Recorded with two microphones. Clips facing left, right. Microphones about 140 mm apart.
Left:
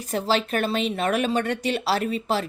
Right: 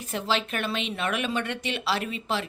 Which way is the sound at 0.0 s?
40° left (ahead or behind).